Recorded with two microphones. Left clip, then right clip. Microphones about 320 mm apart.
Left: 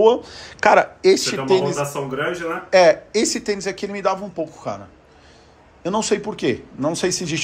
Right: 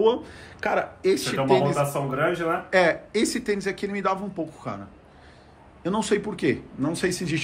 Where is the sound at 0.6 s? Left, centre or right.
Left.